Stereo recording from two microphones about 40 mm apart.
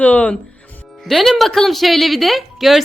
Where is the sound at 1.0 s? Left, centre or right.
Centre.